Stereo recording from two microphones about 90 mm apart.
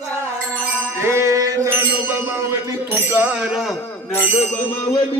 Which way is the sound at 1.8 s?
30° right (ahead or behind).